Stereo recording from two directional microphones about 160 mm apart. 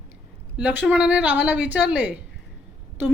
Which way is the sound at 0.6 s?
10° right (ahead or behind).